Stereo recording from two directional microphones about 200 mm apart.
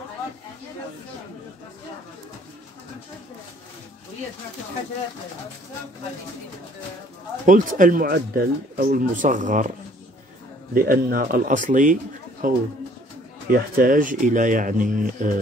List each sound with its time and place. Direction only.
7.4 s speech: 40° right (ahead or behind)
10.7 s a man's voice: 45° right (ahead or behind)